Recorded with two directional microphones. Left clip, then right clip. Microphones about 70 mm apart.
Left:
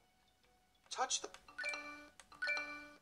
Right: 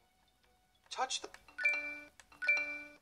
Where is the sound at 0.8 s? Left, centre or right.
Right.